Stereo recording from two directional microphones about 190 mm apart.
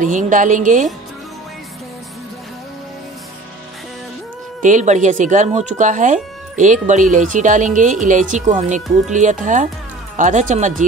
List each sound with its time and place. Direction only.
0.0 s a woman's voice: 40° right (ahead or behind)
4.6 s speech: 40° right (ahead or behind)